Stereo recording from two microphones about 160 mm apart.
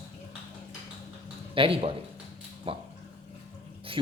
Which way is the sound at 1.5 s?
35° right (ahead or behind).